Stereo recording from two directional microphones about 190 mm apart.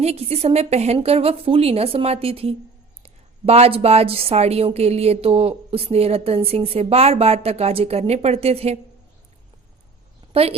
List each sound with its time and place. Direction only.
0.0 s a woman's voice: 35° right (ahead or behind)
10.3 s a woman's voice: 30° right (ahead or behind)